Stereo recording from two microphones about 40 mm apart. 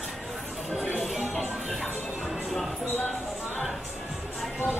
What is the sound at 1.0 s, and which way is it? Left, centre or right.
Music, centre.